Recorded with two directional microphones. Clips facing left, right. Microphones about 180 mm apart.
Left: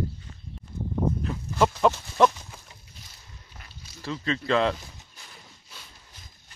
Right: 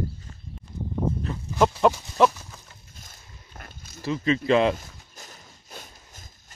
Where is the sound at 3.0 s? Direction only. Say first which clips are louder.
Right 2 dB; 50° right (ahead or behind).